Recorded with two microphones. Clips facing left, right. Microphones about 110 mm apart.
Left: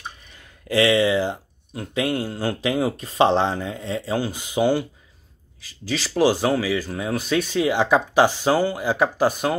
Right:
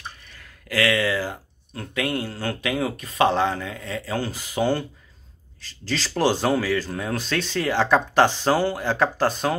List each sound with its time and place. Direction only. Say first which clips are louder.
0.3 s speech: left 7 dB; 20° left (ahead or behind)